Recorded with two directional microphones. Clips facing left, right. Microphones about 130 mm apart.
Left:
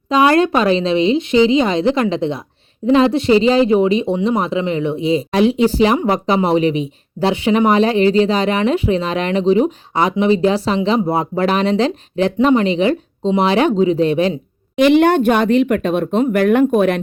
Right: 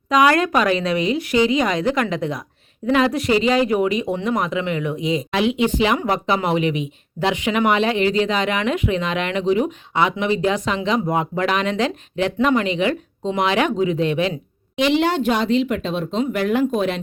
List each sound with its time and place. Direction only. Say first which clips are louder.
0.1 s speech: left 3 dB; 30° left (ahead or behind)
14.8 s speech: left 7 dB; 55° left (ahead or behind)